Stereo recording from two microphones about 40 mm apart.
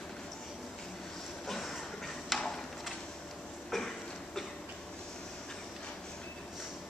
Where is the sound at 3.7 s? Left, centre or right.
Centre.